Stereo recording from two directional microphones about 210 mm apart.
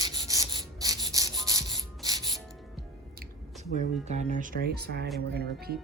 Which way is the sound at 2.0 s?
20° right (ahead or behind).